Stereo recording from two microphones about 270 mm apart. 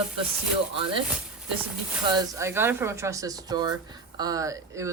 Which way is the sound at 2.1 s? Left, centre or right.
Centre.